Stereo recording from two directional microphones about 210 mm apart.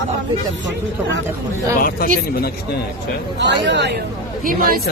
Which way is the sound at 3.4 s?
55° right (ahead or behind).